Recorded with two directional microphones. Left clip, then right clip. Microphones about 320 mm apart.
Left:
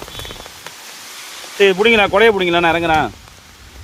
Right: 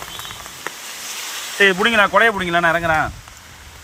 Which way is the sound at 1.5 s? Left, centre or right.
Centre.